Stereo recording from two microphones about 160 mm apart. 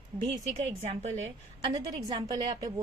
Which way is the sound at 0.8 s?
45° right (ahead or behind).